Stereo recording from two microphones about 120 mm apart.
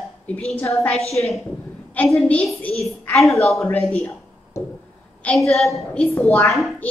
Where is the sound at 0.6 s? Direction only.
20° left (ahead or behind).